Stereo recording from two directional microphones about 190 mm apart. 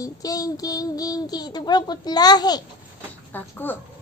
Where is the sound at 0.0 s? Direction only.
20° left (ahead or behind).